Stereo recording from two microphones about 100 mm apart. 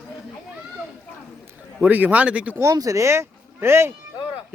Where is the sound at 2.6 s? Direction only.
35° right (ahead or behind).